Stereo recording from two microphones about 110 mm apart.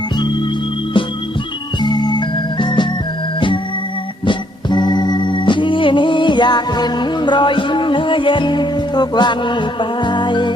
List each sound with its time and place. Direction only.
1.8 s organ: 40° left (ahead or behind)
4.3 s music: 45° left (ahead or behind)